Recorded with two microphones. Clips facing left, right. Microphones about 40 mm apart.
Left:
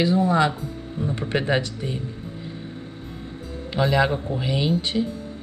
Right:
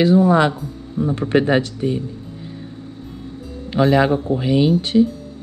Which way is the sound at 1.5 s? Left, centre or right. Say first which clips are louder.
Right 6 dB; centre.